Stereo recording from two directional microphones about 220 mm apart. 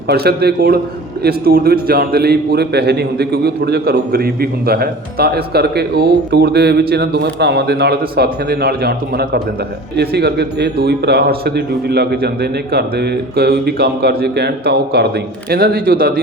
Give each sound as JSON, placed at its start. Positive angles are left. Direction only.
{"t": 0.1, "sound": "a man's voice", "side_deg": -45}